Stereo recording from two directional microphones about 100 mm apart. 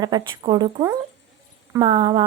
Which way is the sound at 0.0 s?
45° right (ahead or behind).